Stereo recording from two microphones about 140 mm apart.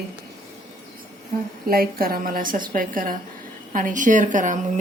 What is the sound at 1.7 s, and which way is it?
A woman's voice, 90° right.